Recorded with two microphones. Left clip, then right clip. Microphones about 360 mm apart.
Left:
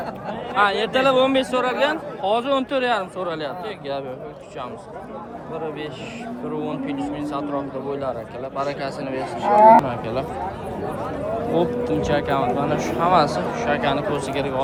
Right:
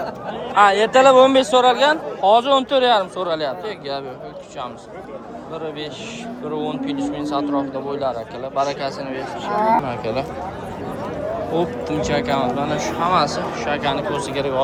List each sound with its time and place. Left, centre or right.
0.5 s a man's voice: centre
6.6 s speech: centre
9.4 s speech: centre
9.7 s speech: centre
11.5 s speech: centre